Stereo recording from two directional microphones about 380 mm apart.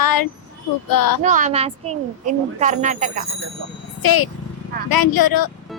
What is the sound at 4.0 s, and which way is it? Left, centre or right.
A woman's voice, left.